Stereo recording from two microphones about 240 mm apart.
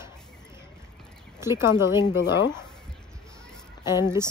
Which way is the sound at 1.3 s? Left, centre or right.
Centre.